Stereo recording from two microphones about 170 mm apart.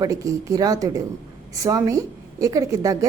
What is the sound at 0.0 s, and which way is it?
A woman's voice, 20° right (ahead or behind).